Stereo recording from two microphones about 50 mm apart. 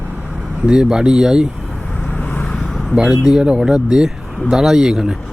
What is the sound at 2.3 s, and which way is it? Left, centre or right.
Vehicle, left.